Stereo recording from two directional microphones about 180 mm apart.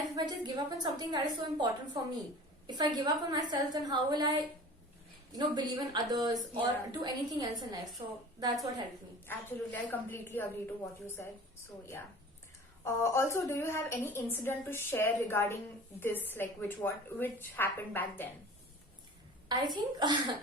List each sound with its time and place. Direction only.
0.2 s speech: 25° right (ahead or behind)
9.2 s a woman's voice: 10° left (ahead or behind)
12.8 s a woman's voice: 15° left (ahead or behind)
19.5 s speech: 25° right (ahead or behind)